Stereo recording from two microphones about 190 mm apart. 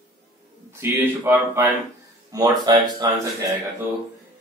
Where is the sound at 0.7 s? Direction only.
10° right (ahead or behind).